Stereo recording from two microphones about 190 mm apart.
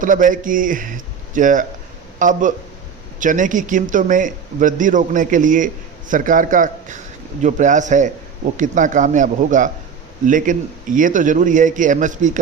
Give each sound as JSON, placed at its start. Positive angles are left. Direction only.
{"t": 0.0, "sound": "a man's voice", "side_deg": -45}